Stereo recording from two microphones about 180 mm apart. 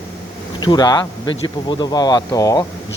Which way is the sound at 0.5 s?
25° left (ahead or behind).